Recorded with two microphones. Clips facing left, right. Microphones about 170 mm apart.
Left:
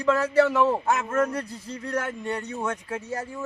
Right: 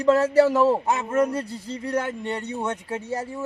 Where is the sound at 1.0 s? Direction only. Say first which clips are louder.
Right 6 dB; 15° right (ahead or behind).